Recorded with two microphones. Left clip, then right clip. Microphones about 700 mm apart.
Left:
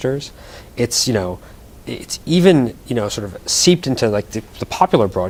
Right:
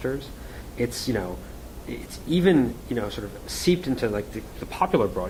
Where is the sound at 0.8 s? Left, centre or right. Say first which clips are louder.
Left 9 dB; left.